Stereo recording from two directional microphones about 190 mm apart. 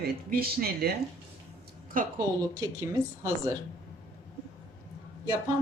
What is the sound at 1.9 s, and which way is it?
Speech, 45° right (ahead or behind).